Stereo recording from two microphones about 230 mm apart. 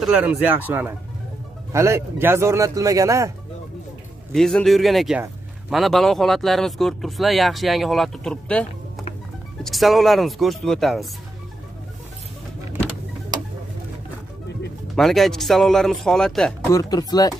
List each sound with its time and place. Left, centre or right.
0.0 s speech: centre
4.3 s speech: centre
15.0 s speech: centre
16.7 s speech: centre